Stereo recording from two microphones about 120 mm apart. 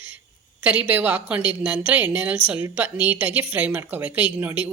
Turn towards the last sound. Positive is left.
turn(degrees=-15)  # may be behind; listen again after turning